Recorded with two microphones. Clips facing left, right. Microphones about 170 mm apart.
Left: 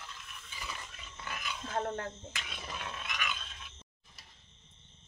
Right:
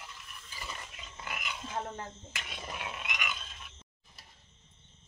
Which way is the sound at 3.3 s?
5° right (ahead or behind).